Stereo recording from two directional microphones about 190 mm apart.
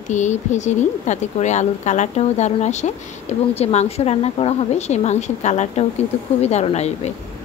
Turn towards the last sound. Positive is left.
turn(degrees=35)  # may be behind; listen again after turning